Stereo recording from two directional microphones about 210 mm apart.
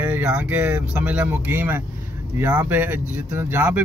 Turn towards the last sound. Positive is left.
turn(degrees=-10)  # may be behind; listen again after turning